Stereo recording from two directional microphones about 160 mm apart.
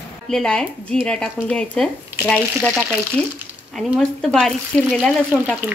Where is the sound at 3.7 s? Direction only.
5° left (ahead or behind).